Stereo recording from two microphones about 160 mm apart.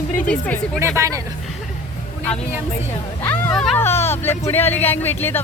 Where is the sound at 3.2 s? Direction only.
10° left (ahead or behind).